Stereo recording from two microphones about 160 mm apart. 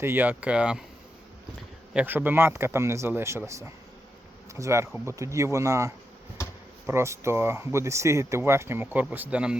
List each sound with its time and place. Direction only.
0.0 s speech: 10° right (ahead or behind)
1.9 s speech: 10° right (ahead or behind)